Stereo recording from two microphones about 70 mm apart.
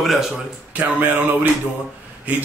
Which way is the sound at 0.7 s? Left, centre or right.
Right.